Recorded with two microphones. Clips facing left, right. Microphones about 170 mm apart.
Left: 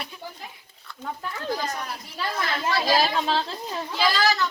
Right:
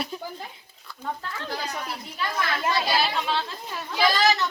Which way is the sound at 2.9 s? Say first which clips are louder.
Left 3 dB; 35° left (ahead or behind).